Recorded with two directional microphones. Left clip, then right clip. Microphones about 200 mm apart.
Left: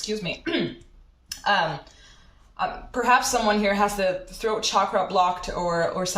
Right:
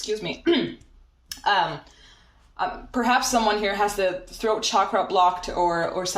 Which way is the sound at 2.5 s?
45° right (ahead or behind).